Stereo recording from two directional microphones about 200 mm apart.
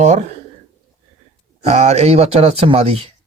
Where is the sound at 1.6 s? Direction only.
35° right (ahead or behind).